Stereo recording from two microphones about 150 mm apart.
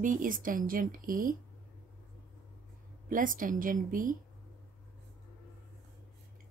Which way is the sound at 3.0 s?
65° right (ahead or behind).